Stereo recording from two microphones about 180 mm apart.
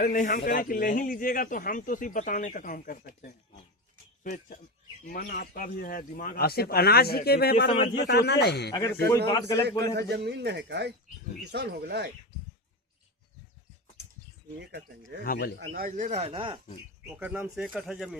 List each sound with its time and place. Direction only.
0.0 s speech: 50° left (ahead or behind)
8.7 s a man's voice: 20° left (ahead or behind)
9.9 s speech: 65° right (ahead or behind)
14.6 s speech: 65° right (ahead or behind)
15.2 s speech: 60° left (ahead or behind)
15.5 s speech: 60° right (ahead or behind)
16.2 s speech: 25° right (ahead or behind)
17.2 s speech: 10° right (ahead or behind)